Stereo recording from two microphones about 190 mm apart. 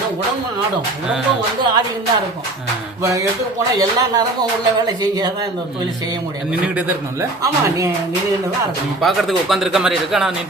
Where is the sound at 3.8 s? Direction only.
20° right (ahead or behind).